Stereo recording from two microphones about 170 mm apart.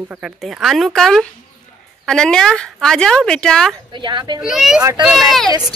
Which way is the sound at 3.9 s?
25° right (ahead or behind).